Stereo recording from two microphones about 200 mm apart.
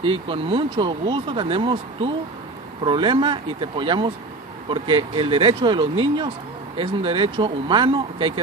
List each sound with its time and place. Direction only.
0.0 s speech: 25° right (ahead or behind)